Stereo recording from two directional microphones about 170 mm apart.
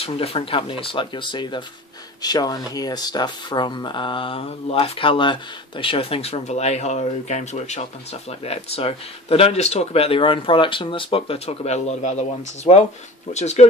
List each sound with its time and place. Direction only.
0.0 s speech: 35° left (ahead or behind)